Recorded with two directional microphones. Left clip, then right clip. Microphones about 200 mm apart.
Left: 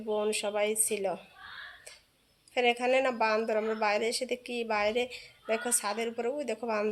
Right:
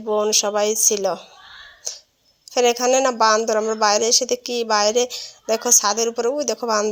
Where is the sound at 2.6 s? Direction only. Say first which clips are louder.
Right 10 dB; 35° right (ahead or behind).